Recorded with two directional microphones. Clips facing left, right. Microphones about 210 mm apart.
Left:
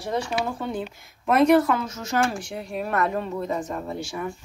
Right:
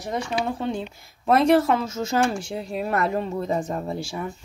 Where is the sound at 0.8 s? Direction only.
30° right (ahead or behind).